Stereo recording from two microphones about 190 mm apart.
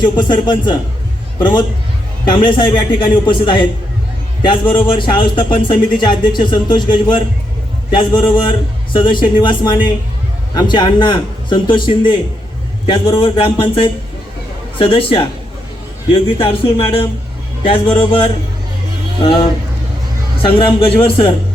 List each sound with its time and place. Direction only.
0.0 s a man's voice: 25° left (ahead or behind)
16.4 s a man's voice: 25° left (ahead or behind)
20.4 s a man's voice: 30° left (ahead or behind)